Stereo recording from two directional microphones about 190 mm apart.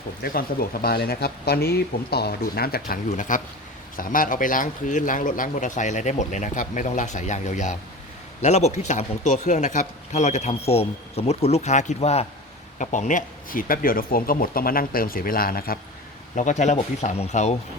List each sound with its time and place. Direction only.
0.2 s a man's voice: 50° left (ahead or behind)